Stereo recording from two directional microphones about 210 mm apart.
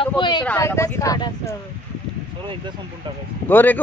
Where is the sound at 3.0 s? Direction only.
25° right (ahead or behind).